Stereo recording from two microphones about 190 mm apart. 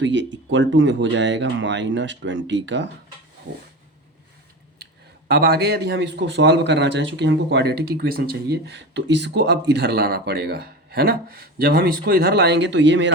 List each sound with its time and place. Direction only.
0.0 s speech: 75° right (ahead or behind)
5.3 s a man's voice: 60° right (ahead or behind)